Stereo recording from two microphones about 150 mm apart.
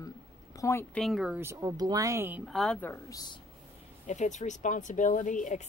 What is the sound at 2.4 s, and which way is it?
Speech, centre (ahead or behind).